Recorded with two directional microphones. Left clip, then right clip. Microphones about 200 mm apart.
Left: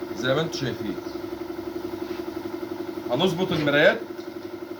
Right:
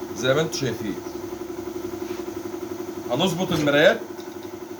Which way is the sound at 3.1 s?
5° right (ahead or behind).